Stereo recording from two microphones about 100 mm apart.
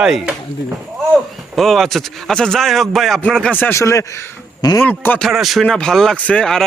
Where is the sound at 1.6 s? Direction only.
Centre (ahead or behind).